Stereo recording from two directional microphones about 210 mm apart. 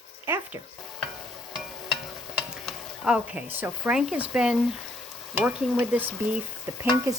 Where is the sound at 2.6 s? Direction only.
5° right (ahead or behind).